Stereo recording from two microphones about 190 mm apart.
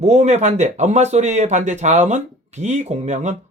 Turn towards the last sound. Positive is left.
turn(degrees=-40)  # may be behind; listen again after turning